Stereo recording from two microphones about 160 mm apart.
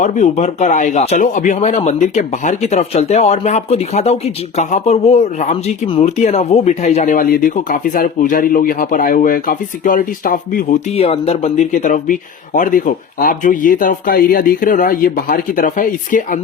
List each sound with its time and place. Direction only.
0.0 s speech: 50° left (ahead or behind)
10.9 s speech: 40° left (ahead or behind); by 16.4 s 55° left (ahead or behind)